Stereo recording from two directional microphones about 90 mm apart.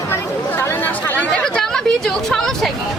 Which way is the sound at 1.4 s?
5° left (ahead or behind).